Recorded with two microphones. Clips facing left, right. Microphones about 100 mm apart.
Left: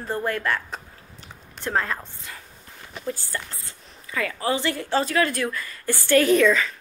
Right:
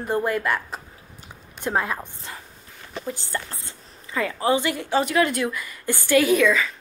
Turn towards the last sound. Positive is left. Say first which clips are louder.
# left 1 dB
turn(degrees=-10)  # may be behind; listen again after turning